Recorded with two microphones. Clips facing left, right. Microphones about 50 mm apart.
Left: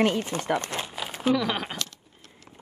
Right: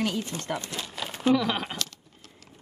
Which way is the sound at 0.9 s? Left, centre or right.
Centre.